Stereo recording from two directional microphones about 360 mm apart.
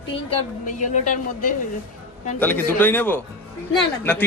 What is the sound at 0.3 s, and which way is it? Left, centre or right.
A woman's voice, left.